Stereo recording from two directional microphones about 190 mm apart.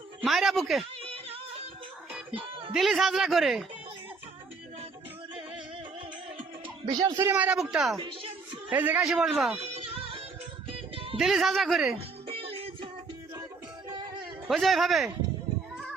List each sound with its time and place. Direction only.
0.2 s speech: centre (ahead or behind)
1.0 s music: 30° right (ahead or behind)
2.7 s speech: centre (ahead or behind)
6.8 s speech: 15° right (ahead or behind); by 7.9 s centre (ahead or behind)
7.9 s a woman's voice: 25° right (ahead or behind)
8.7 s speech: 10° right (ahead or behind)
9.6 s music: 30° right (ahead or behind)
11.2 s speech: centre (ahead or behind)
11.9 s music: 30° right (ahead or behind)
14.4 s speech: centre (ahead or behind)